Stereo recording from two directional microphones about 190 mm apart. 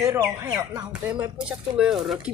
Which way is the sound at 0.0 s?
15° right (ahead or behind).